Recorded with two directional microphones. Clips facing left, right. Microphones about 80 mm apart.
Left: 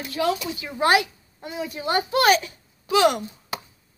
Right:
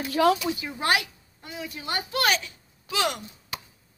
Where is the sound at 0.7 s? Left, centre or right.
Centre.